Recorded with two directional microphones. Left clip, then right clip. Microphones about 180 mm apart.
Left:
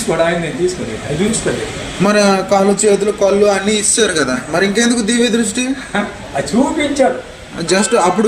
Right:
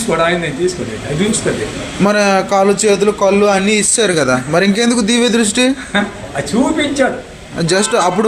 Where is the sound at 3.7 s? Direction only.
60° left (ahead or behind).